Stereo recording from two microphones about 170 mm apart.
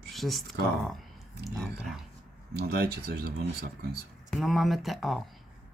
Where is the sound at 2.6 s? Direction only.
70° right (ahead or behind).